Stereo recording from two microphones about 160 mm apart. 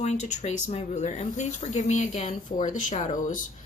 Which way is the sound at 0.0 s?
45° left (ahead or behind).